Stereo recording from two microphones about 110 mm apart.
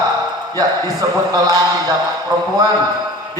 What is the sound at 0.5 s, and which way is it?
Speech, 35° right (ahead or behind).